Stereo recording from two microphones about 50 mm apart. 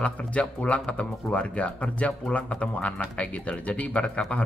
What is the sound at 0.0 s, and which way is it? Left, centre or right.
A man's voice, left.